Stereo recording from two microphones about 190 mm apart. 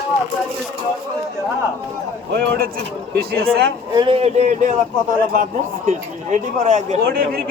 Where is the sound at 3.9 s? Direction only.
25° right (ahead or behind).